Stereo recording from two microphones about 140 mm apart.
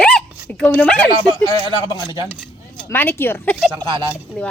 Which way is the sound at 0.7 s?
10° left (ahead or behind).